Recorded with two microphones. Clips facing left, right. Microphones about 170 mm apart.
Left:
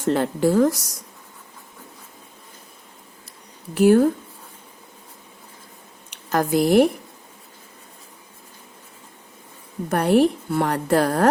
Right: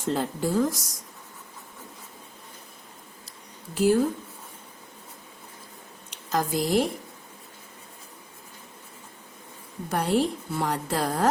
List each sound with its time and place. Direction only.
0.0 s a woman's voice: 70° left (ahead or behind)
3.8 s a woman's voice: 65° left (ahead or behind)
6.1 s speech: 60° left (ahead or behind)
9.9 s a woman's voice: 60° left (ahead or behind)